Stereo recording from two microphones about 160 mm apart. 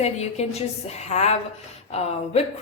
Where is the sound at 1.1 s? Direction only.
45° left (ahead or behind).